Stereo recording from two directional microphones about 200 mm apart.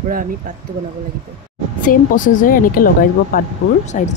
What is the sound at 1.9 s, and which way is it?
A woman's voice, 40° left (ahead or behind).